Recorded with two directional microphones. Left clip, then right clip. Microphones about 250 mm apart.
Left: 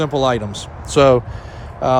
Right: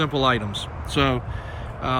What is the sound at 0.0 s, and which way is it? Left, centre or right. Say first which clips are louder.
Speech: left 4 dB; left.